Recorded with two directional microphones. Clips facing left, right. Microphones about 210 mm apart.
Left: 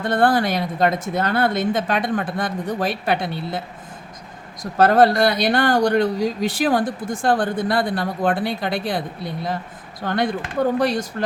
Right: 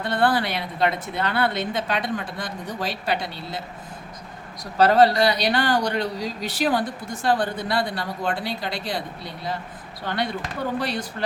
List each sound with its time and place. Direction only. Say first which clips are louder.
0.0 s speech: left 4 dB; 50° left (ahead or behind)
4.6 s speech: left 2 dB; 50° left (ahead or behind)